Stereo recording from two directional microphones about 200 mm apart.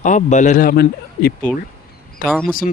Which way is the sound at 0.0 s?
40° left (ahead or behind).